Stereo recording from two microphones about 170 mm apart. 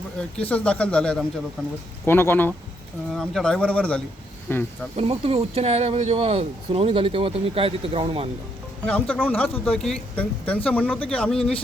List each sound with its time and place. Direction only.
0.3 s speech: 5° left (ahead or behind)
4.9 s speech: 35° right (ahead or behind)
8.9 s speech: 10° left (ahead or behind)